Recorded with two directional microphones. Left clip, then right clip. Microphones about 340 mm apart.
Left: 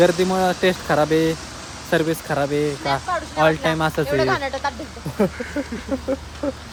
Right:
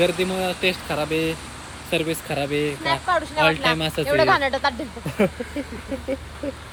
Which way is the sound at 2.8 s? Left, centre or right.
Right.